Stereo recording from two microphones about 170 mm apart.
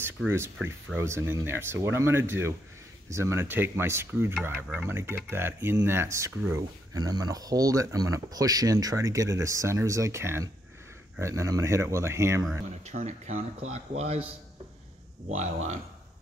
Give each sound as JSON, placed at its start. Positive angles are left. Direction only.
{"t": 0.3, "sound": "speech", "side_deg": -15}
{"t": 12.8, "sound": "speech", "side_deg": -45}
{"t": 15.2, "sound": "speech", "side_deg": -40}